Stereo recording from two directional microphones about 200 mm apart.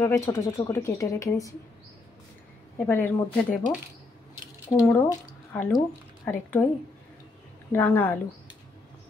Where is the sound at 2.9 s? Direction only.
10° left (ahead or behind).